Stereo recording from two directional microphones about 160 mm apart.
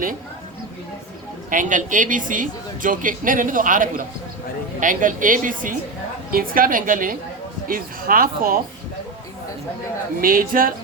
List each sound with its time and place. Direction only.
1.5 s speech: 55° right (ahead or behind)
10.2 s speech: 60° right (ahead or behind)